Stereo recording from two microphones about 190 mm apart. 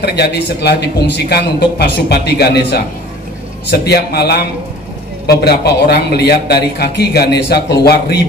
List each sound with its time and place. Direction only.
0.0 s a man's voice: 60° left (ahead or behind)